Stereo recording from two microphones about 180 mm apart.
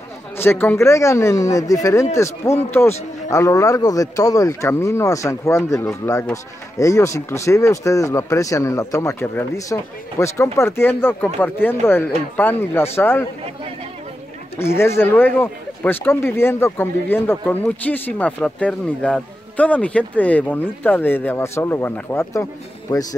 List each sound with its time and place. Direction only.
0.4 s speech: 10° left (ahead or behind)
14.6 s speech: 15° left (ahead or behind)